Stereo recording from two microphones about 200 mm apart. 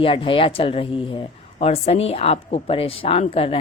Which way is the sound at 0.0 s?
25° left (ahead or behind).